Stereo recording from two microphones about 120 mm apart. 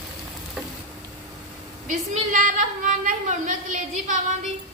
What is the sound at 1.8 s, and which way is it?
A woman's voice, 90° right.